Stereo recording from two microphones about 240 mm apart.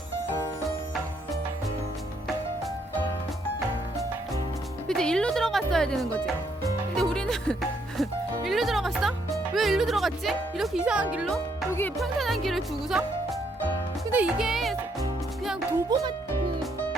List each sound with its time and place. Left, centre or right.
4.9 s speech: centre
6.9 s music: centre
8.4 s speech: centre
14.1 s speech: centre
15.9 s speech: centre